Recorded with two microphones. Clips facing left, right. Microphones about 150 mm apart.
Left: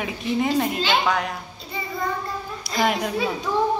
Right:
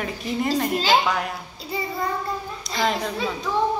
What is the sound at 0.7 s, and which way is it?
Speech, 40° right (ahead or behind).